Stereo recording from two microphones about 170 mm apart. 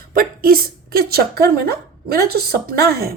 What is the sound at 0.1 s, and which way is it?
A woman's voice, 60° right (ahead or behind).